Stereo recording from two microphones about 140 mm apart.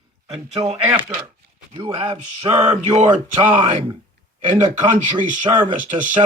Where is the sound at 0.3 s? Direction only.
45° right (ahead or behind).